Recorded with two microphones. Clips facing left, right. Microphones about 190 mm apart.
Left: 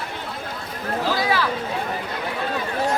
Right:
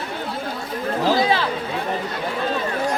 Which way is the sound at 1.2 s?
25° right (ahead or behind).